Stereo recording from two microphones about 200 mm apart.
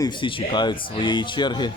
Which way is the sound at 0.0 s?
25° left (ahead or behind).